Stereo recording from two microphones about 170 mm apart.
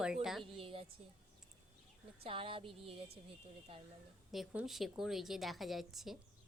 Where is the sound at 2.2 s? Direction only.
30° right (ahead or behind).